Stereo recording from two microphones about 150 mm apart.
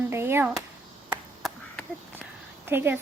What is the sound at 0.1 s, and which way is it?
Chop, 15° right (ahead or behind).